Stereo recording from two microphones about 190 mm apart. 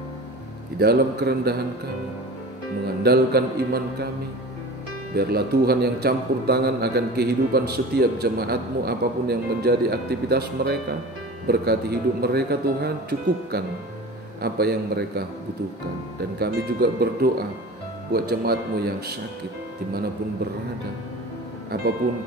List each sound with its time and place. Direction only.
0.7 s a man's voice: 55° right (ahead or behind)
3.0 s a man's voice: 55° right (ahead or behind)
5.1 s a man's voice: 55° right (ahead or behind)
14.4 s a man's voice: 55° right (ahead or behind)
16.3 s a man's voice: 55° right (ahead or behind)